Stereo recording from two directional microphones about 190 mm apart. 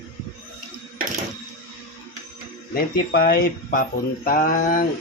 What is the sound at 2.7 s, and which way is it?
Speech, 55° left (ahead or behind).